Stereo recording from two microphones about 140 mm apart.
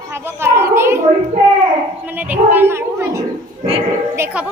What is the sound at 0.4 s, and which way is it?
Speech, 20° right (ahead or behind).